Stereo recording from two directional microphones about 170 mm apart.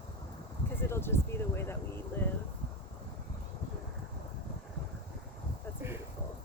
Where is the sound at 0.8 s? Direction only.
15° left (ahead or behind).